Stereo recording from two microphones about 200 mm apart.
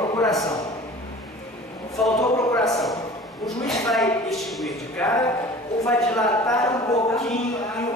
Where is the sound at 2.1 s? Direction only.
15° left (ahead or behind).